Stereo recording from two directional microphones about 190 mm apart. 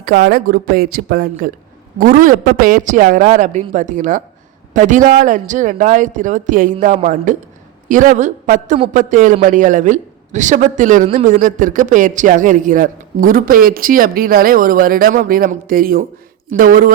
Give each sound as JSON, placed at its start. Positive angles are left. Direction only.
{"t": 0.0, "sound": "a man's voice", "side_deg": -60}